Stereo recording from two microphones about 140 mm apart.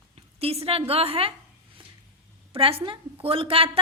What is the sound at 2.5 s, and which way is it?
A woman's voice, 40° right (ahead or behind).